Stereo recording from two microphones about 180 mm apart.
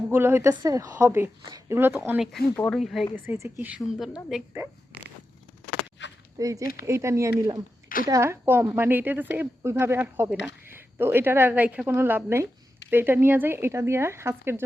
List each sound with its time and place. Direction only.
0.1 s a woman's voice: 15° right (ahead or behind)
3.2 s a woman's voice: 15° right (ahead or behind)
6.4 s a woman's voice: 20° right (ahead or behind)